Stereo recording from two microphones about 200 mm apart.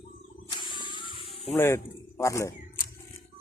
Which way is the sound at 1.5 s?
10° left (ahead or behind).